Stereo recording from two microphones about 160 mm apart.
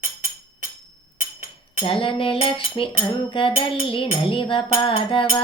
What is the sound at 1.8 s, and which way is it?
Music, 35° left (ahead or behind).